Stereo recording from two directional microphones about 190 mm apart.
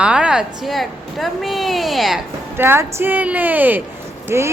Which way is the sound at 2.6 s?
10° right (ahead or behind).